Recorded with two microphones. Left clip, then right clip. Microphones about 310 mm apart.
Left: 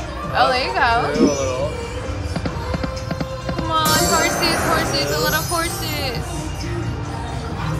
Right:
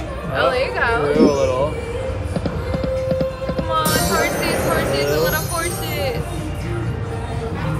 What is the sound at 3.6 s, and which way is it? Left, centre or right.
Music, centre.